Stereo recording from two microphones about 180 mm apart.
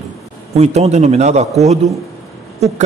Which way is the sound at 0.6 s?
40° right (ahead or behind).